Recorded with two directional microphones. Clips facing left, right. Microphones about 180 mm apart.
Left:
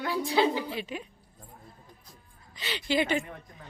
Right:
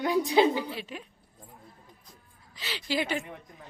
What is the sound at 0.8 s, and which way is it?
Speech, centre (ahead or behind).